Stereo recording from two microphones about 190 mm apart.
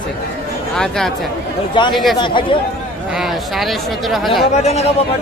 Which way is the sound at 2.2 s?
25° left (ahead or behind).